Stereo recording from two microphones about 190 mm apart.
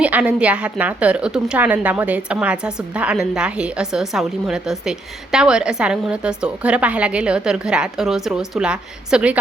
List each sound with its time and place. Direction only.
0.0 s a woman's voice: 5° right (ahead or behind)